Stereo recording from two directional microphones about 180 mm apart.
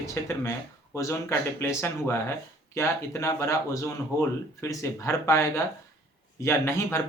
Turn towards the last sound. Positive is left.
turn(degrees=15)  # may be behind; listen again after turning